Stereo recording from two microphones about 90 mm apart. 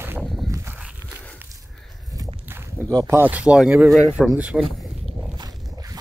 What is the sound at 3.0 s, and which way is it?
Speech, 30° right (ahead or behind).